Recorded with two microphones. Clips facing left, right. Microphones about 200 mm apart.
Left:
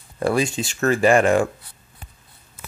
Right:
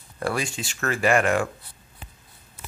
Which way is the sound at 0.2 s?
20° left (ahead or behind).